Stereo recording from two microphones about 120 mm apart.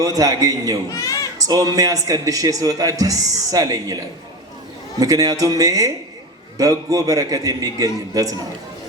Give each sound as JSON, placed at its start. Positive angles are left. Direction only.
{"t": 0.0, "sound": "speech", "side_deg": -30}
{"t": 0.9, "sound": "a sound", "side_deg": 30}
{"t": 1.5, "sound": "speech", "side_deg": -30}
{"t": 4.9, "sound": "speech", "side_deg": -30}